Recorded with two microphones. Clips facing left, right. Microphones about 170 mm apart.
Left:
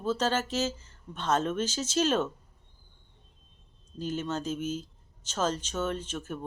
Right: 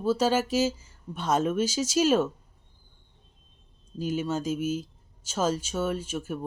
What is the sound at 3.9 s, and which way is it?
Speech, 10° right (ahead or behind).